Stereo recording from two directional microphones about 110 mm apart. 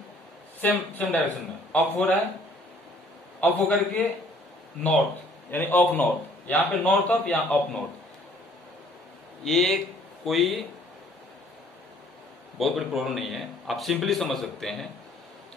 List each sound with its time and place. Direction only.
0.6 s a man's voice: 15° left (ahead or behind)
3.3 s a man's voice: 15° left (ahead or behind)
5.5 s a man's voice: 20° left (ahead or behind)
9.4 s a man's voice: 5° left (ahead or behind)
12.5 s a man's voice: centre (ahead or behind)